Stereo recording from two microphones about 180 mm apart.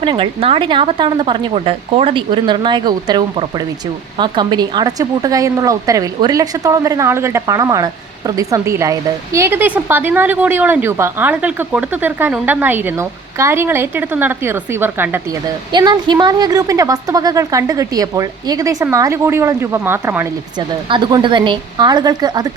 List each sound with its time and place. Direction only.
0.0 s a woman's voice: 30° right (ahead or behind); by 15.2 s 10° right (ahead or behind)
15.7 s a woman's voice: 25° right (ahead or behind)
20.6 s a woman's voice: 25° right (ahead or behind)